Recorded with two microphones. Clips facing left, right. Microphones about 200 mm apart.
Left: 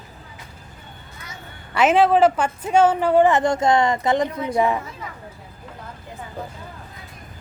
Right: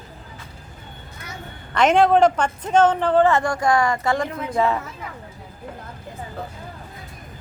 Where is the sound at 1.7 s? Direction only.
5° left (ahead or behind).